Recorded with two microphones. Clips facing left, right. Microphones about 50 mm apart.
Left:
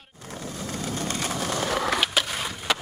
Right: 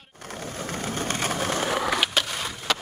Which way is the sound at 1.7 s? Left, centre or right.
Centre.